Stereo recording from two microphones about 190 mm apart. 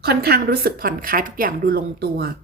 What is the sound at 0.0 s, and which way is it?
A woman's voice, 55° right (ahead or behind).